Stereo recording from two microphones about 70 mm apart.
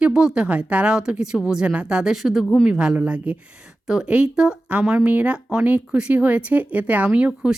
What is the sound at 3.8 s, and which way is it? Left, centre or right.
A woman's voice, centre.